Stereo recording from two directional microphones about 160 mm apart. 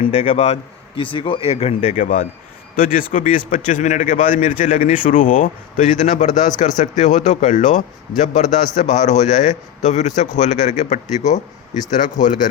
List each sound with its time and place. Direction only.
0.0 s speech: 45° left (ahead or behind)
2.7 s speech: 60° left (ahead or behind)